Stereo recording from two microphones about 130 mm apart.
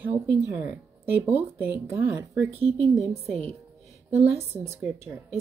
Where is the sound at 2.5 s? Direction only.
50° right (ahead or behind).